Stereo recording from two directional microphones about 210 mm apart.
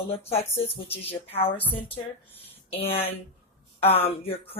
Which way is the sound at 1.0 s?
25° left (ahead or behind).